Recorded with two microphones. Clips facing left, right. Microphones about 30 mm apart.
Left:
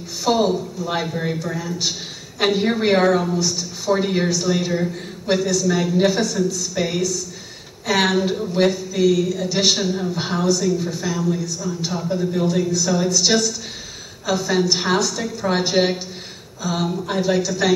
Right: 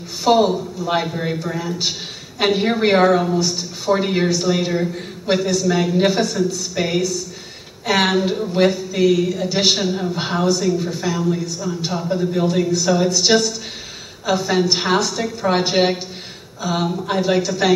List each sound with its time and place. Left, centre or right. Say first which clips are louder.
0.2 s a woman's voice: right 3 dB; centre